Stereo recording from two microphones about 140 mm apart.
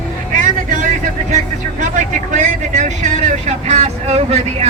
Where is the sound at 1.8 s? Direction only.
60° right (ahead or behind).